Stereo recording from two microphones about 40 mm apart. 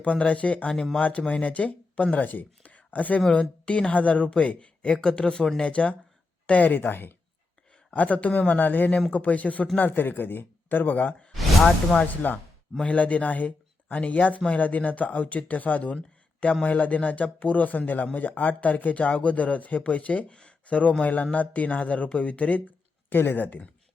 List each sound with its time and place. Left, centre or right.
0.0 s speech: left
2.2 s speech: left; by 5.5 s centre
5.6 s speech: left
6.5 s speech: left
7.9 s speech: left
9.7 s speech: left
11.3 s a sound: centre
12.0 s speech: left
12.8 s speech: left
16.4 s speech: left
20.2 s a sound: left
21.0 s speech: left